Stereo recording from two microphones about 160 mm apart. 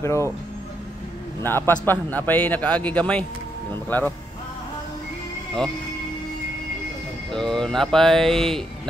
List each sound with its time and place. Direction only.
0.0 s a man's voice: 15° left (ahead or behind)
1.4 s a man's voice: 15° left (ahead or behind)
7.3 s speech: 5° left (ahead or behind)